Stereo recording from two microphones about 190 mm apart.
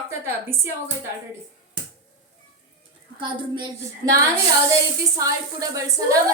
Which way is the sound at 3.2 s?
25° right (ahead or behind).